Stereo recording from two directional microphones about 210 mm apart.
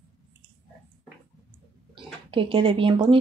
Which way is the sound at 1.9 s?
25° right (ahead or behind).